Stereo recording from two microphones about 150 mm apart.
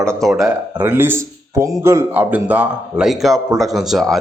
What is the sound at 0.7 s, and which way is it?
A man's voice, 15° right (ahead or behind).